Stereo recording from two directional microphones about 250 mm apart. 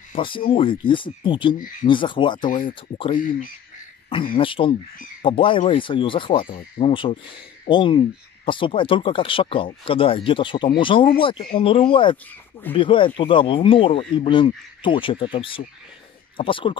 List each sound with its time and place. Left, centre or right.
0.1 s speech: centre
3.2 s speech: left
4.4 s speech: left